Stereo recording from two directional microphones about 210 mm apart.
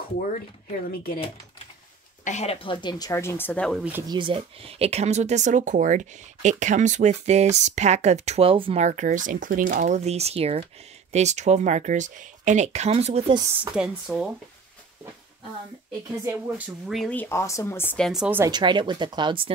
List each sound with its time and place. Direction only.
2.2 s speech: 30° left (ahead or behind); by 4.0 s 5° right (ahead or behind)
4.1 s speech: 25° right (ahead or behind)
13.7 s speech: 5° right (ahead or behind)
16.3 s speech: 5° right (ahead or behind)
18.5 s speech: 20° right (ahead or behind)